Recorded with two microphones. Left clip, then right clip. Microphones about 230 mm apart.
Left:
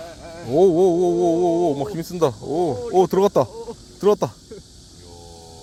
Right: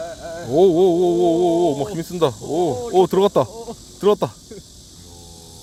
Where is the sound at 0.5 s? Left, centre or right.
Centre.